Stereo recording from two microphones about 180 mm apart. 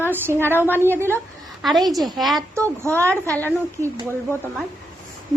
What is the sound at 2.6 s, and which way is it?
Speech, 15° right (ahead or behind).